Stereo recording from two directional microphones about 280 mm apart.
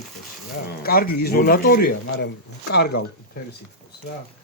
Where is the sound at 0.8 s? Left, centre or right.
Left.